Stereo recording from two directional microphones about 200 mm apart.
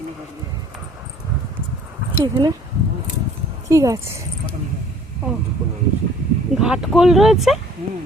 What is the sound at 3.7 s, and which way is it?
Speech, 15° right (ahead or behind).